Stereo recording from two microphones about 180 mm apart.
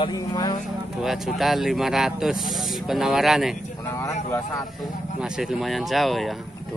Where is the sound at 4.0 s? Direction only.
20° left (ahead or behind).